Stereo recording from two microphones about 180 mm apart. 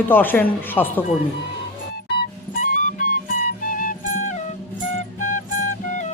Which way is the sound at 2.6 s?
50° left (ahead or behind).